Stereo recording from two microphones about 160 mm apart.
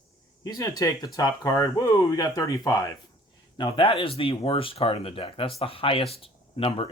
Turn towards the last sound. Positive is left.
turn(degrees=35)  # may be behind; listen again after turning